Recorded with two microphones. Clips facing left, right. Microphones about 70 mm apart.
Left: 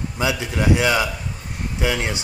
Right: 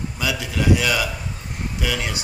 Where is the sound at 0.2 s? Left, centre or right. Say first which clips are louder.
Left 2 dB; left.